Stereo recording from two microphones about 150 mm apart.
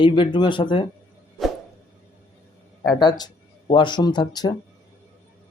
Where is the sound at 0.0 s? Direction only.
30° left (ahead or behind).